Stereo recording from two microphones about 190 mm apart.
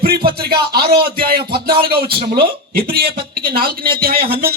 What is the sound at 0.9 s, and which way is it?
A man's voice, 55° right (ahead or behind).